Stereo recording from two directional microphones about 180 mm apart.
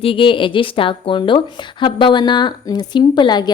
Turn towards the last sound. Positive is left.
turn(degrees=25)  # may be behind; listen again after turning